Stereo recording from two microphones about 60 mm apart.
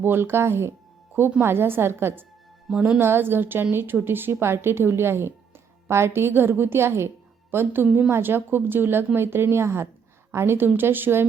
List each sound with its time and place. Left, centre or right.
0.0 s a woman's voice: right
2.6 s speech: centre
3.0 s a woman's voice: right